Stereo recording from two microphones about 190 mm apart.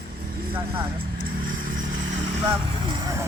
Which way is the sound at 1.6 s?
45° right (ahead or behind).